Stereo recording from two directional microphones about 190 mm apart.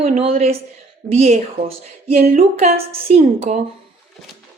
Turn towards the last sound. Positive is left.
turn(degrees=-35)  # may be behind; listen again after turning